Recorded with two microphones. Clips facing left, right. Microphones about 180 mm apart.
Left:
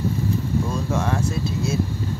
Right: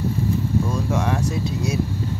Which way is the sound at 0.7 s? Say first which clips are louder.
Right 1 dB; 15° right (ahead or behind).